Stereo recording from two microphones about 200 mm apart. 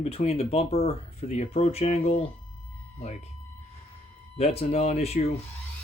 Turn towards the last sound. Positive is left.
turn(degrees=30)  # may be behind; listen again after turning